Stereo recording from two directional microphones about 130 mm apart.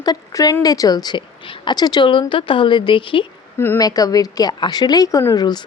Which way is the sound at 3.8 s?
30° left (ahead or behind).